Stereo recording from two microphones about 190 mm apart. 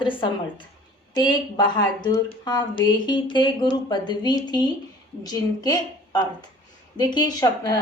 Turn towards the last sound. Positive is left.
turn(degrees=20)  # may be behind; listen again after turning